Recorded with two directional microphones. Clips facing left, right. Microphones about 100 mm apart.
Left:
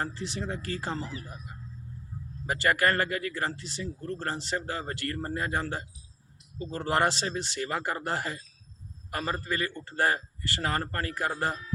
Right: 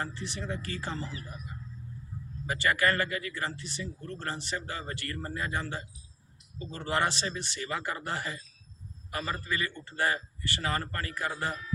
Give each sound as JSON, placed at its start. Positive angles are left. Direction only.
{"t": 0.0, "sound": "speech", "side_deg": 40}
{"t": 2.5, "sound": "a man's voice", "side_deg": 50}